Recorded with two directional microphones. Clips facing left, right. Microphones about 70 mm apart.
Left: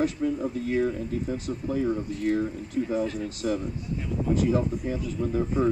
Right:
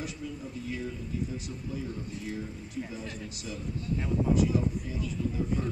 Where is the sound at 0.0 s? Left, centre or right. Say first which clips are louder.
Left 12 dB; left.